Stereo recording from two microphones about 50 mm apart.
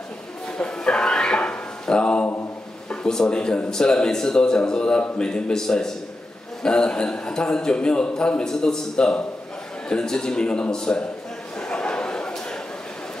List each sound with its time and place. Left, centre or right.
0.6 s music: centre
2.9 s a man's voice: centre
11.7 s a sound: centre